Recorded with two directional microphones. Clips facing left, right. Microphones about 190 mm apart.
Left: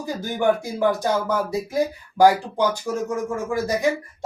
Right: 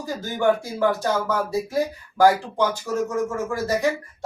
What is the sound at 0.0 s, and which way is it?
Speech, 15° left (ahead or behind).